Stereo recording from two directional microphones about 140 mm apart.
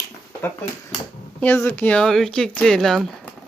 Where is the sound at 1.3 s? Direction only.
15° left (ahead or behind).